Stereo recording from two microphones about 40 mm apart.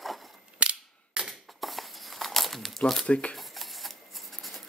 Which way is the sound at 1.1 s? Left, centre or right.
Right.